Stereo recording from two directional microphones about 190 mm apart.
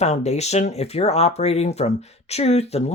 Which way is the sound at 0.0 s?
35° left (ahead or behind).